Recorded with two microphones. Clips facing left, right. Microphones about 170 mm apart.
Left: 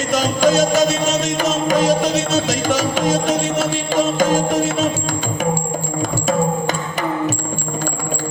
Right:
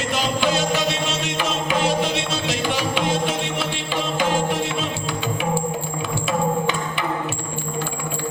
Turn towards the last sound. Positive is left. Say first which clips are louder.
# left 3 dB
turn(degrees=40)  # may be behind; listen again after turning